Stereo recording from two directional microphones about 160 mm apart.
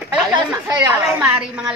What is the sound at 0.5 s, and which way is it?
Speech, 15° right (ahead or behind).